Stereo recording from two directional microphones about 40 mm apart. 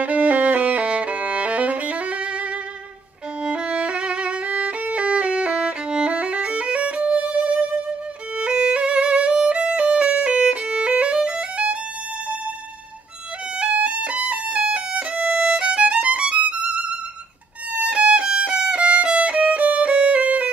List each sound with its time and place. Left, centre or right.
0.0 s music: right
3.4 s violin: right
11.5 s violin: right
13.6 s violin: right
17.7 s violin: right